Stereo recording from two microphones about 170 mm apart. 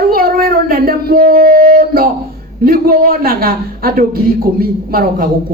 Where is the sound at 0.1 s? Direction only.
60° right (ahead or behind).